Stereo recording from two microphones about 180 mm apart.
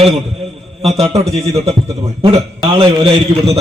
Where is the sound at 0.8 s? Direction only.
35° right (ahead or behind).